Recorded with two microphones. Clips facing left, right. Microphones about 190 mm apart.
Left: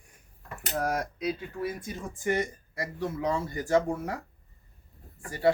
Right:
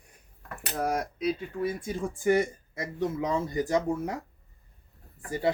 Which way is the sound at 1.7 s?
30° right (ahead or behind).